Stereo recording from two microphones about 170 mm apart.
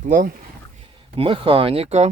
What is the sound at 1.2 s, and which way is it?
Speech, 30° right (ahead or behind).